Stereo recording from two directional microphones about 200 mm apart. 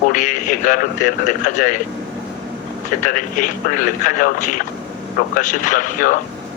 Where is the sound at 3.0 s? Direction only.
40° left (ahead or behind).